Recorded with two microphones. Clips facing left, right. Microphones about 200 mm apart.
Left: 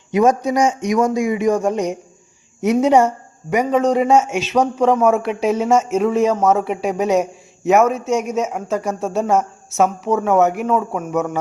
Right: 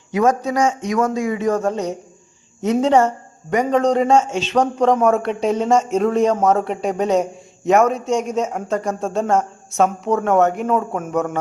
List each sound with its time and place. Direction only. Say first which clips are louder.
0.1 s a man's voice: left 2 dB; 20° left (ahead or behind); by 11.3 s centre (ahead or behind)